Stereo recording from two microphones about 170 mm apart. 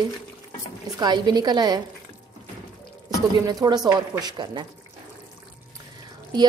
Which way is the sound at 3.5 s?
25° right (ahead or behind).